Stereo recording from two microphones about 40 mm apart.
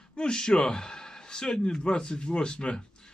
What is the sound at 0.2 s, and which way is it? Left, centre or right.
A man's voice, centre.